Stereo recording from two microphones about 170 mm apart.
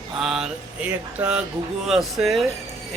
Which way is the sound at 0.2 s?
5° right (ahead or behind).